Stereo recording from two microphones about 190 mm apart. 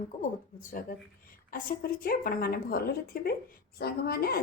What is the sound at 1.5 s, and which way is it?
A woman's voice, 50° left (ahead or behind).